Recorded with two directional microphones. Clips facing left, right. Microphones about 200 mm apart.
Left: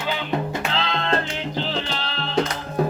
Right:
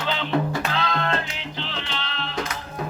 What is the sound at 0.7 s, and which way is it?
Music, 25° left (ahead or behind).